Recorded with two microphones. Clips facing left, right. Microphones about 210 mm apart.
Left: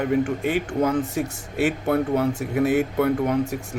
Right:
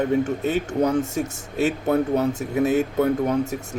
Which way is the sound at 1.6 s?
40° right (ahead or behind).